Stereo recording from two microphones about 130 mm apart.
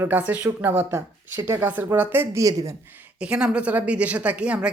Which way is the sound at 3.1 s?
10° right (ahead or behind).